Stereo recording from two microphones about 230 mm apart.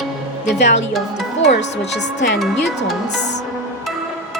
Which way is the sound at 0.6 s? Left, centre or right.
Left.